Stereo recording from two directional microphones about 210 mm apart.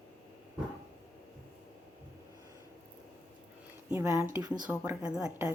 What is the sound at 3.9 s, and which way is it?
Speech, 10° right (ahead or behind).